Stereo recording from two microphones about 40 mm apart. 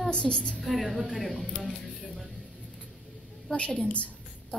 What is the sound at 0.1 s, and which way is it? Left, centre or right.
Speech, centre.